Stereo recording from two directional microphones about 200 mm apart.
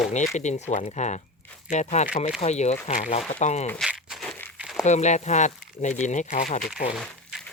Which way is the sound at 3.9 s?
5° right (ahead or behind).